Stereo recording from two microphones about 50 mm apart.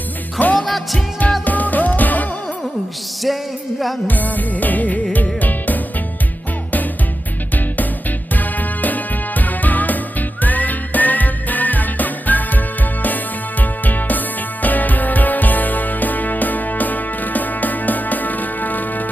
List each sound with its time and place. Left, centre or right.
0.3 s music: left
0.6 s music: centre
1.5 s music: left
3.3 s music: centre
4.0 s music: left
8.3 s music: left